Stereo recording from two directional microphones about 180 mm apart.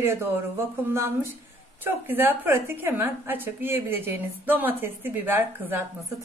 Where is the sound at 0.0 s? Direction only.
15° right (ahead or behind).